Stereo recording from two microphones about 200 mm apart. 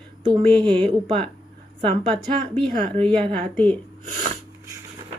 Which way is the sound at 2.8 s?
30° right (ahead or behind).